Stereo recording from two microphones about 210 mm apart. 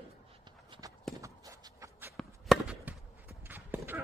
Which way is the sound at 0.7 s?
15° right (ahead or behind).